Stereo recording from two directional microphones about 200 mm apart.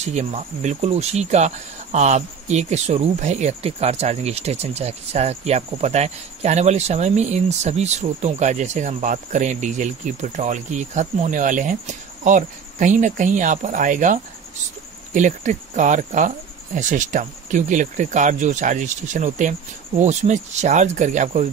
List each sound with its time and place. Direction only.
0.0 s speech: 35° right (ahead or behind)